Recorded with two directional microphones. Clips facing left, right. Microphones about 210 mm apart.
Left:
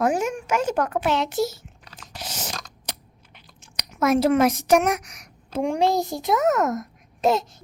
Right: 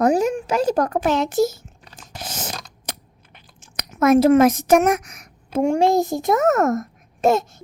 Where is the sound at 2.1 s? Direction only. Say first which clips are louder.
Right 3 dB; 50° right (ahead or behind).